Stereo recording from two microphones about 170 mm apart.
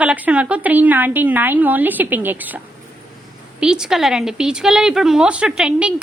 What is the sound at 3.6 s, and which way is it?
A woman's voice, 5° right (ahead or behind).